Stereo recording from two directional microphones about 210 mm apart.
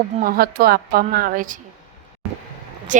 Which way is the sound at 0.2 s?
45° right (ahead or behind).